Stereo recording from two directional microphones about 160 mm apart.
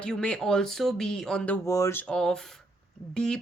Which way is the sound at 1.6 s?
20° left (ahead or behind).